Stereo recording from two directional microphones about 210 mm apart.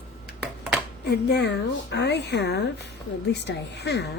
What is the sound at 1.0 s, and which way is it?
Speech, 50° left (ahead or behind).